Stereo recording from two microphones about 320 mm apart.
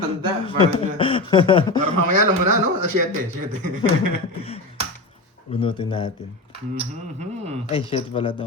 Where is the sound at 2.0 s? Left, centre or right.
Right.